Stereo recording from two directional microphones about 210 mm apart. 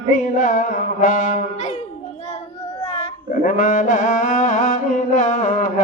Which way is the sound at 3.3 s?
40° left (ahead or behind).